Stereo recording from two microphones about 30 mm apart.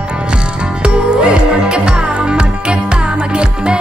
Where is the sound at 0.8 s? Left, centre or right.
Right.